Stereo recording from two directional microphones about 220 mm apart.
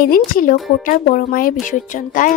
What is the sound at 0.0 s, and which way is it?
Speech, 40° left (ahead or behind).